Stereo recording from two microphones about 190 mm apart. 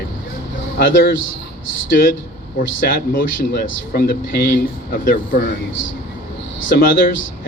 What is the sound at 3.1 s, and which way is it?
Speech, 50° left (ahead or behind).